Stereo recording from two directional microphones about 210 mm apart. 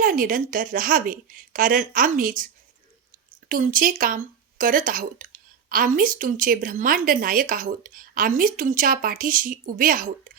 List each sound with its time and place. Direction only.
0.0 s speech: 40° right (ahead or behind)
3.5 s speech: 40° right (ahead or behind)